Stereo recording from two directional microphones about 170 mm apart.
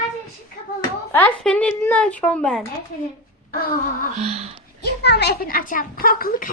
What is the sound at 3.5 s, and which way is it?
Speech, 60° left (ahead or behind).